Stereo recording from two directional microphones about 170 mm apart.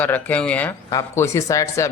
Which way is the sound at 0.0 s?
10° left (ahead or behind).